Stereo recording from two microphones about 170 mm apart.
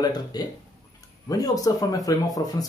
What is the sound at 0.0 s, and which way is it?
Speech, 25° left (ahead or behind).